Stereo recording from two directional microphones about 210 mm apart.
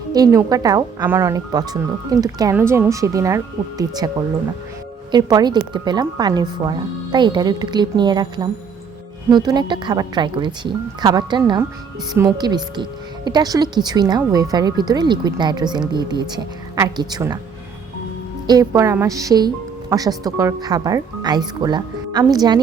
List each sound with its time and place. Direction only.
0.1 s speech: 15° right (ahead or behind)
5.1 s speech: 20° right (ahead or behind)
18.4 s speech: 15° right (ahead or behind)